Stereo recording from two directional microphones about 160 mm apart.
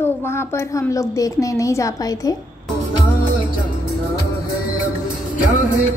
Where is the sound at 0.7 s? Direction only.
20° left (ahead or behind).